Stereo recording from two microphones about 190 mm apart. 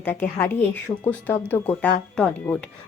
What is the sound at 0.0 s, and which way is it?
Speech, 10° left (ahead or behind).